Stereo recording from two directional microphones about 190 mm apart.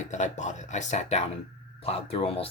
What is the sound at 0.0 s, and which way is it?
Speech, 40° left (ahead or behind).